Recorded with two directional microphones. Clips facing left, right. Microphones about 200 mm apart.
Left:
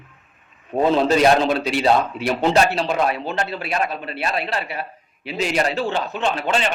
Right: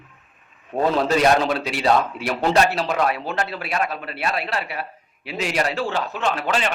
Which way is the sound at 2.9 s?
25° left (ahead or behind).